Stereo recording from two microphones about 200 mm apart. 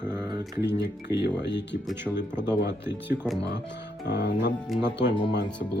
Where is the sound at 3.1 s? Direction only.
10° right (ahead or behind).